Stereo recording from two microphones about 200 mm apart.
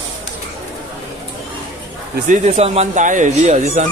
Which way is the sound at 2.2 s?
35° right (ahead or behind).